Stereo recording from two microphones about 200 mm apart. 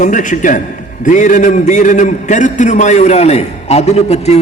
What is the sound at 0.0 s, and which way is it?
A man's voice, 40° left (ahead or behind).